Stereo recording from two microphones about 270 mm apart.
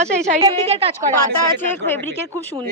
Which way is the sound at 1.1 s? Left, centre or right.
Centre.